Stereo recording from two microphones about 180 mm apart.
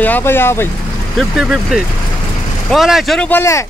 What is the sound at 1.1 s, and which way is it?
Speech, 5° right (ahead or behind).